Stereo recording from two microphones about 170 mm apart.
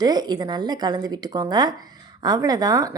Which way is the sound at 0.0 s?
25° right (ahead or behind).